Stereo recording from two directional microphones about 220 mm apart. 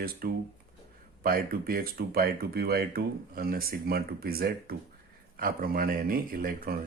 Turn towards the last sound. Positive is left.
turn(degrees=-40)  # may be behind; listen again after turning